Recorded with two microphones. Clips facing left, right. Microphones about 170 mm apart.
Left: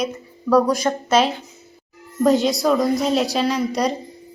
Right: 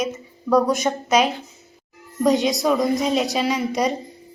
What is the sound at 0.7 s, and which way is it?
Speech, 20° right (ahead or behind).